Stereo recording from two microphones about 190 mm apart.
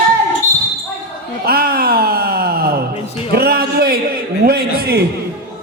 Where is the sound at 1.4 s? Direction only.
50° right (ahead or behind).